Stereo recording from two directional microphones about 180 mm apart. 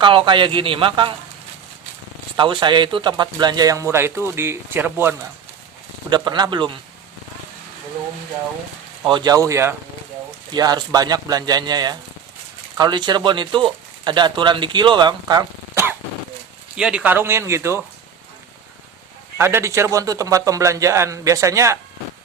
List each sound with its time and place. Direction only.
0.0 s speech: 30° right (ahead or behind)
2.3 s a man's voice: 25° right (ahead or behind)
6.1 s speech: 25° right (ahead or behind)
9.0 s a man's voice: 25° right (ahead or behind)
19.4 s a man's voice: 15° right (ahead or behind)